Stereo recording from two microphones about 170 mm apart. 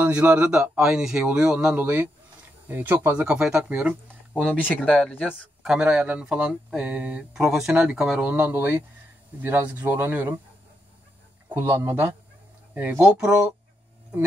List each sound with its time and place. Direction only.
0.0 s speech: 10° right (ahead or behind)
4.8 s speech: 5° left (ahead or behind)
5.6 s speech: 5° right (ahead or behind)
11.4 s speech: 15° right (ahead or behind)